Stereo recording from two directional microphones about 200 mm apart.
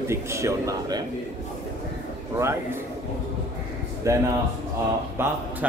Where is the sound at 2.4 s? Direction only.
15° right (ahead or behind).